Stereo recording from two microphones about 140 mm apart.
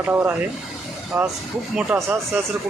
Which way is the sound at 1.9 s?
20° right (ahead or behind).